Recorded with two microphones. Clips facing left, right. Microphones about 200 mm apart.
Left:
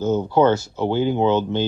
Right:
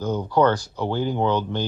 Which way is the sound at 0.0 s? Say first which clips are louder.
Left 3 dB; 25° left (ahead or behind).